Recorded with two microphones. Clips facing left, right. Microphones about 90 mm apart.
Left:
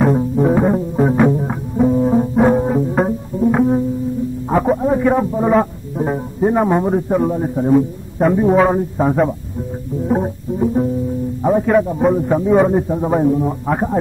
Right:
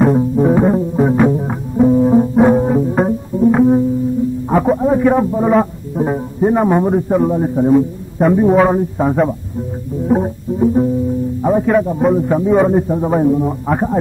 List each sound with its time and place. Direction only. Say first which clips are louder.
0.0 s music: right 2 dB; centre (ahead or behind)
4.5 s a man's voice: right 1 dB; centre (ahead or behind)